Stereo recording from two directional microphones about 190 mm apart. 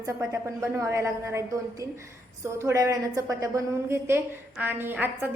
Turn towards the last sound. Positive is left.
turn(degrees=-10)  # may be behind; listen again after turning